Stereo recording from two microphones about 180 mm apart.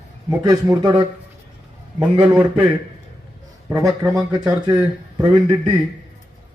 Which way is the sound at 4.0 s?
20° right (ahead or behind).